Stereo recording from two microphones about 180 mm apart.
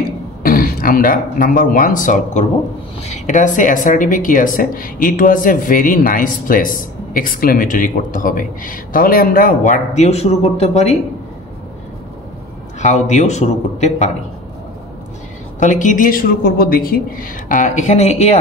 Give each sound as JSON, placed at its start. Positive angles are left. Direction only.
{"t": 0.4, "sound": "speech", "side_deg": 55}
{"t": 12.8, "sound": "a man's voice", "side_deg": 40}
{"t": 15.6, "sound": "speech", "side_deg": 45}